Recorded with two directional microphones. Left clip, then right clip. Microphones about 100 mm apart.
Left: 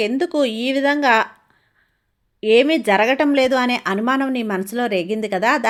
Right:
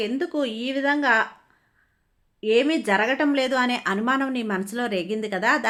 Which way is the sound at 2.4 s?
50° left (ahead or behind).